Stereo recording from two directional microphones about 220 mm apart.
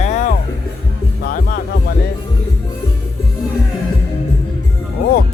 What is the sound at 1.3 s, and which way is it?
Music, 40° left (ahead or behind).